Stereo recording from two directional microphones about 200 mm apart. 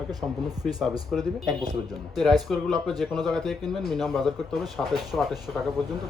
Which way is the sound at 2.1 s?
Centre (ahead or behind).